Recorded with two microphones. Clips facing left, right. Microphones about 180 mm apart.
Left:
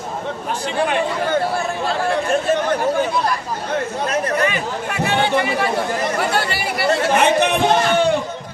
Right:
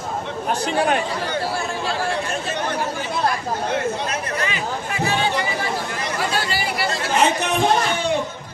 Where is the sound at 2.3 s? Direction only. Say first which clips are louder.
Left 8 dB; 50° left (ahead or behind).